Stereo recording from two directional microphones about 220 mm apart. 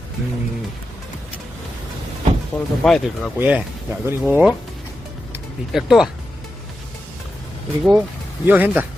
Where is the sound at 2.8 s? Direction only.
Centre (ahead or behind).